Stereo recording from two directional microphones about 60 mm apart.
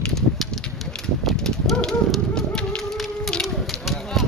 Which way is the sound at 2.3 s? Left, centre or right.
Centre.